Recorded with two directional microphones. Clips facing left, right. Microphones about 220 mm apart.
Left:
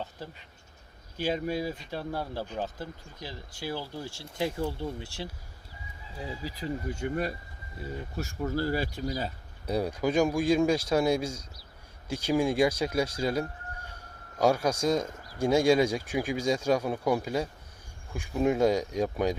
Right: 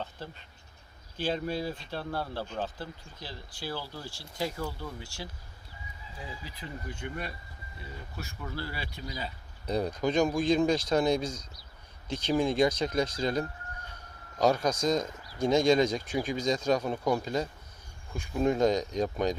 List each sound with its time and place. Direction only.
1.1 s speech: 15° left (ahead or behind); by 9.3 s 40° left (ahead or behind)
9.6 s speech: 10° left (ahead or behind)